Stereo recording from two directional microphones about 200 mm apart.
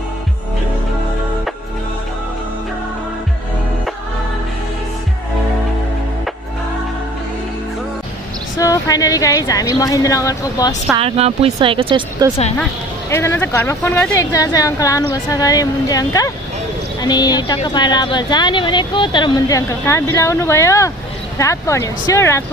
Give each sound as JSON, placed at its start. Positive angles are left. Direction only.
{"t": 8.5, "sound": "a woman's voice", "side_deg": 15}
{"t": 11.0, "sound": "speech", "side_deg": -30}
{"t": 13.1, "sound": "a woman's voice", "side_deg": 10}